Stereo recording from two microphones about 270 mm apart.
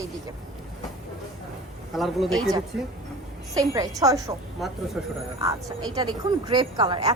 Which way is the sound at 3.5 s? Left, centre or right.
Centre.